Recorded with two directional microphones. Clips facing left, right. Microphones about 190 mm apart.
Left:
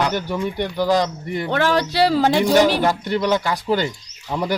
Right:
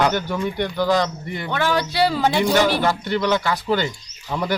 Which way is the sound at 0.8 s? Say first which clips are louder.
Left 2 dB; 35° left (ahead or behind).